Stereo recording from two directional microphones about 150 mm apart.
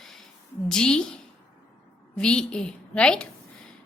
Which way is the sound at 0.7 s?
5° left (ahead or behind).